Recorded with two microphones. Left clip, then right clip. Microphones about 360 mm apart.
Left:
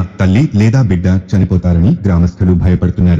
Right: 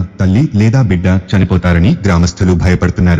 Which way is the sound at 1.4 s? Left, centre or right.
Right.